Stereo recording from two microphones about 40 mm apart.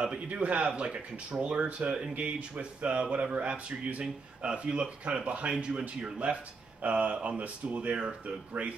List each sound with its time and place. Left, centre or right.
0.3 s speech: right
0.7 s speech: centre; by 8.7 s right